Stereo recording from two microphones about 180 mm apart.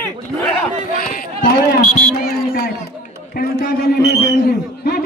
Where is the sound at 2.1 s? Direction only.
60° left (ahead or behind).